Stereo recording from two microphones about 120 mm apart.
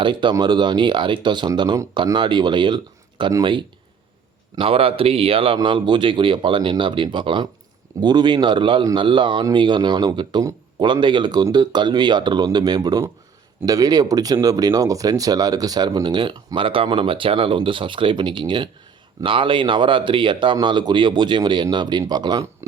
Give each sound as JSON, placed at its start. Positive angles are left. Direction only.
{"t": 0.0, "sound": "speech", "side_deg": -40}
{"t": 4.5, "sound": "speech", "side_deg": -50}